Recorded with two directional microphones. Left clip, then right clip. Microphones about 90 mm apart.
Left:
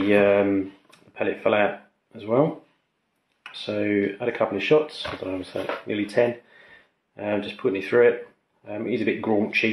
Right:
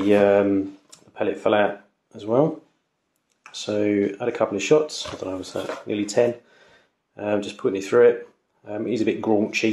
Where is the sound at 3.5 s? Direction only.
35° right (ahead or behind).